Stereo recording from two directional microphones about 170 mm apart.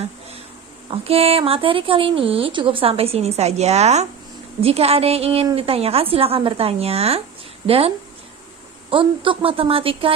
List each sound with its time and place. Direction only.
0.9 s speech: 35° right (ahead or behind)